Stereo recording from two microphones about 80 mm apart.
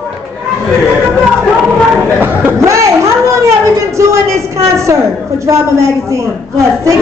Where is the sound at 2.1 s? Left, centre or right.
Right.